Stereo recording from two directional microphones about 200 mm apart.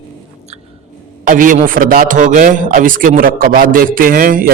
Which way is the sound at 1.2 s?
40° right (ahead or behind).